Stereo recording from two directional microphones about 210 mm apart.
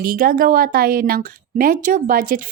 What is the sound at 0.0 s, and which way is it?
Speech, 45° right (ahead or behind).